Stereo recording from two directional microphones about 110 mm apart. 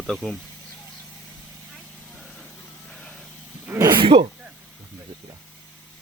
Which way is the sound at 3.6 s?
25° right (ahead or behind).